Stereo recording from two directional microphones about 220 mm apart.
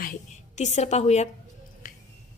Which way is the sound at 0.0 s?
35° left (ahead or behind).